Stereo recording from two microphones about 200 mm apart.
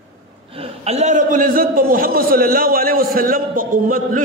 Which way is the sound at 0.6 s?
30° right (ahead or behind).